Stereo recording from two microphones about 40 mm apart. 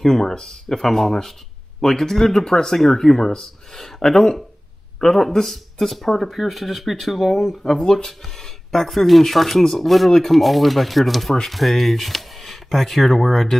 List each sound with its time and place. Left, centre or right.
0.0 s speech: centre